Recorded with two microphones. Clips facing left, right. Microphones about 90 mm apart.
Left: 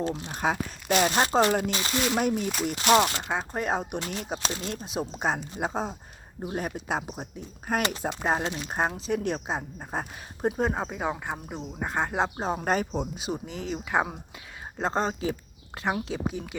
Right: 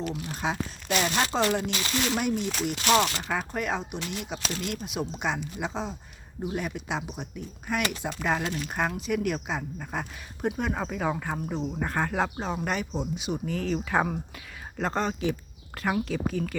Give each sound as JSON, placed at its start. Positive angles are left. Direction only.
{"t": 0.0, "sound": "speech", "side_deg": 30}
{"t": 0.3, "sound": "speech", "side_deg": 45}
{"t": 3.1, "sound": "speech", "side_deg": 20}
{"t": 3.8, "sound": "speech", "side_deg": 45}
{"t": 12.4, "sound": "speech", "side_deg": 40}
{"t": 13.5, "sound": "speech", "side_deg": 20}
{"t": 14.8, "sound": "speech", "side_deg": 30}
{"t": 16.2, "sound": "speech", "side_deg": 15}